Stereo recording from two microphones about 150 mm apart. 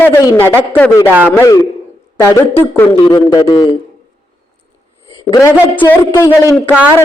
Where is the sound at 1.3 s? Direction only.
25° left (ahead or behind).